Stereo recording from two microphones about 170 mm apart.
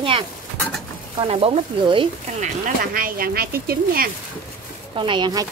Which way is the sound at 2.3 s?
45° right (ahead or behind).